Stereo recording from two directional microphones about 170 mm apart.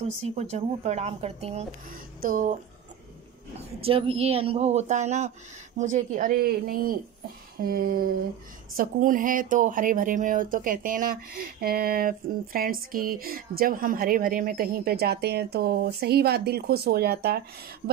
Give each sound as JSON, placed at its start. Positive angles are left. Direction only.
{"t": 0.0, "sound": "a woman's voice", "side_deg": -40}
{"t": 1.9, "sound": "speech", "side_deg": -55}
{"t": 3.8, "sound": "a woman's voice", "side_deg": -35}